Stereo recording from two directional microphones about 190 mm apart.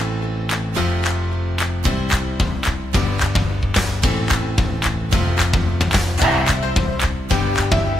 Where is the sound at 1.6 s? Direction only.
Centre (ahead or behind).